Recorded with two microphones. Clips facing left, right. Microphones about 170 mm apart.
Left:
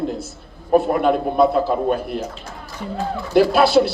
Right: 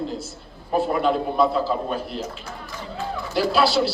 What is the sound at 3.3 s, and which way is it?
Speech, 55° left (ahead or behind).